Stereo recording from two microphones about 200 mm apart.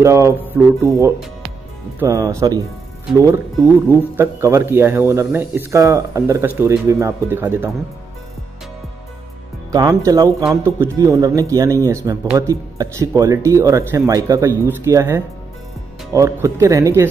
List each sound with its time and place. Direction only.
0.0 s speech: 15° right (ahead or behind)
4.2 s speech: 15° right (ahead or behind)
9.7 s speech: 15° right (ahead or behind)